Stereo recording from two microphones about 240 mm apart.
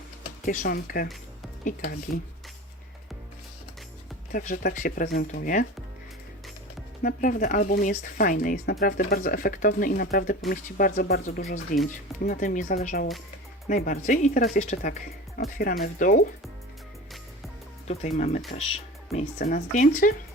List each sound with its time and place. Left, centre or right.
0.4 s speech: left
4.3 s speech: left
7.0 s speech: left
17.8 s speech: left